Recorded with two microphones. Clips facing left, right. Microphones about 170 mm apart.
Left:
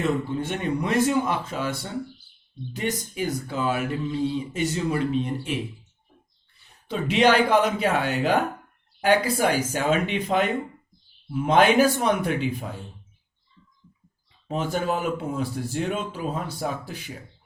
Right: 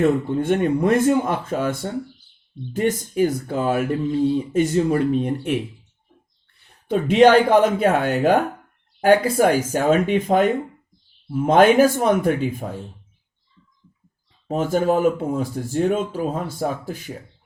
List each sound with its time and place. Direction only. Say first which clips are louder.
0.0 s speech: right 6 dB; 50° right (ahead or behind)
6.8 s speech: right 6 dB; 50° right (ahead or behind)
14.4 s speech: right 6 dB; 45° right (ahead or behind)